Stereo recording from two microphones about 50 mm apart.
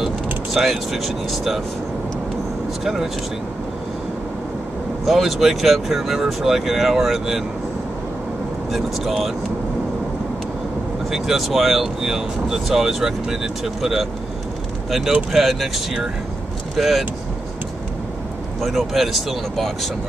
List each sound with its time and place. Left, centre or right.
0.0 s speech: centre
2.8 s speech: centre
5.0 s speech: centre
8.7 s speech: centre
11.1 s speech: centre
18.6 s speech: centre